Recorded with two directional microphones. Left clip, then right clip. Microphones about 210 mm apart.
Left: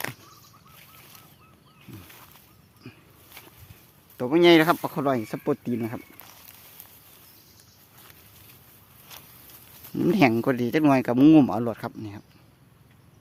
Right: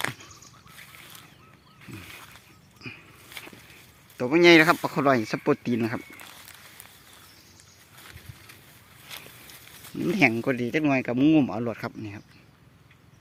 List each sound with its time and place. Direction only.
2.8 s a sound: 5° right (ahead or behind)
4.2 s speech: 10° left (ahead or behind)
10.1 s speech: 20° left (ahead or behind)
11.6 s speech: 10° left (ahead or behind)